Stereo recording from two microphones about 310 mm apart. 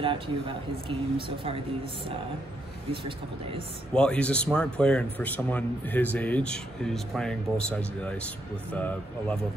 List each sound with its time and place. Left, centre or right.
0.0 s speech: centre
3.9 s speech: centre